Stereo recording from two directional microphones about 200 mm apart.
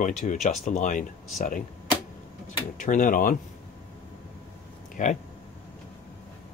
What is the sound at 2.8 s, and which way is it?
Speech, 40° left (ahead or behind).